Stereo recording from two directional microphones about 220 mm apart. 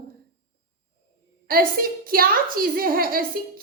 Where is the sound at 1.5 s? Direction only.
40° right (ahead or behind).